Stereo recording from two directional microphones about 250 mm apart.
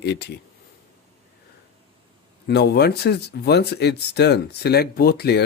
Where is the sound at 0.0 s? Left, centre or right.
Left.